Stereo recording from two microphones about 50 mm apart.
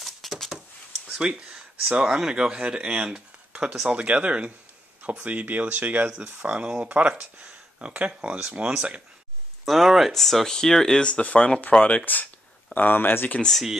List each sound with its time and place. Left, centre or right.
0.0 s a sound: centre
1.2 s speech: centre
2.0 s speech: centre
5.0 s speech: right
6.0 s speech: centre
9.7 s speech: centre
11.1 s speech: left
13.5 s speech: centre